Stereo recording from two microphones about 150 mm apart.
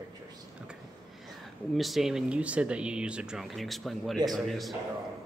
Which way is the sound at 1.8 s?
Centre (ahead or behind).